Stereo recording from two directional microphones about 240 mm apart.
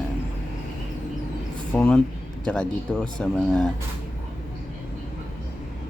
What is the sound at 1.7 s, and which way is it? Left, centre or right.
Speech, centre.